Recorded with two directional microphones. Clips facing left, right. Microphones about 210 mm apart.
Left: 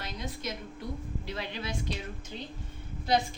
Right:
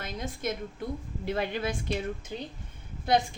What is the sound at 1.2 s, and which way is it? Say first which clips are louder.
Speech: right 11 dB; 55° right (ahead or behind).